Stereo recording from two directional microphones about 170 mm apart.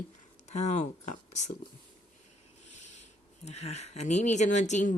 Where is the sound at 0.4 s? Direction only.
40° left (ahead or behind).